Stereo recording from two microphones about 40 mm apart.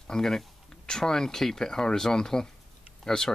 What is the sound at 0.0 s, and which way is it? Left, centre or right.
Speech, centre.